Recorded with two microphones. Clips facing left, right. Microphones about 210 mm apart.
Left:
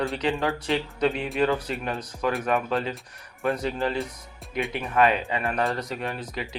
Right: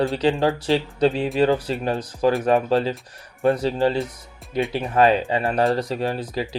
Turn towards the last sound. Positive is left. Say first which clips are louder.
# right 7 dB
turn(degrees=-35)  # may be behind; listen again after turning